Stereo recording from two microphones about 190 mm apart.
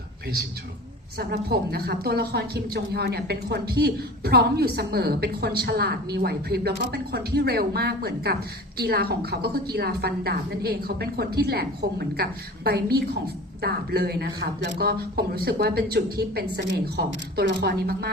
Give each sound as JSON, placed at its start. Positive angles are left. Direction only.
{"t": 1.2, "sound": "a woman's voice", "side_deg": -55}